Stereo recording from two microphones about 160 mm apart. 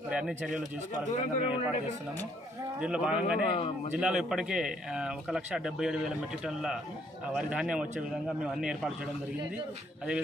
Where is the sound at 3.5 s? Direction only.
35° left (ahead or behind).